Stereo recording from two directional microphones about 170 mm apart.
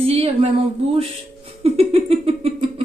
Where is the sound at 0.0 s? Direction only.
35° right (ahead or behind).